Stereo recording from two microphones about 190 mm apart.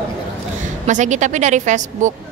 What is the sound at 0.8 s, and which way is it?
A woman's voice, 40° right (ahead or behind).